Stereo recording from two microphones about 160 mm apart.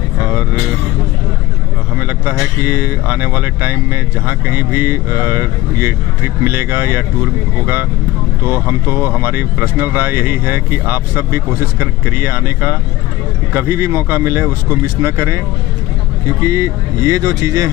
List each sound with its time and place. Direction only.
0.2 s vehicle: 10° right (ahead or behind)
2.0 s speech: 10° right (ahead or behind)